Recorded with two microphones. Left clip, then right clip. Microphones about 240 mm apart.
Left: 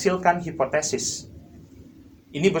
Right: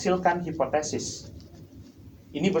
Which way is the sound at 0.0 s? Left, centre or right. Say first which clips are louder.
Left 3 dB; left.